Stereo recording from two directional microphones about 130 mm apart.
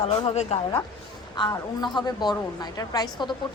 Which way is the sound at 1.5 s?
35° left (ahead or behind).